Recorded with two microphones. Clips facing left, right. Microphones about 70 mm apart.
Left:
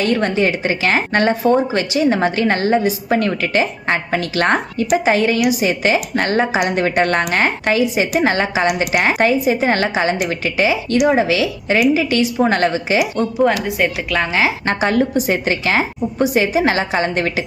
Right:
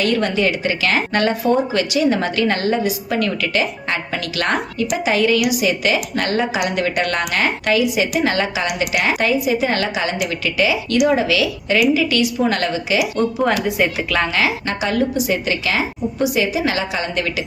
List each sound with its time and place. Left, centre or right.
0.0 s a woman's voice: left
13.1 s a woman's voice: centre
14.3 s speech: left
14.7 s a woman's voice: left